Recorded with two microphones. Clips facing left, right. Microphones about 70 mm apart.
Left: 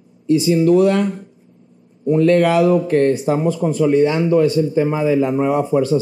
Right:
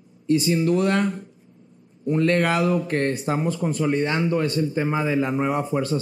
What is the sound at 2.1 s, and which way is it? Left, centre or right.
A man's voice, right.